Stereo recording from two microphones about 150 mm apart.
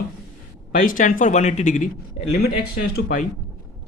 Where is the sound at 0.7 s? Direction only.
65° left (ahead or behind); by 2.3 s 45° left (ahead or behind).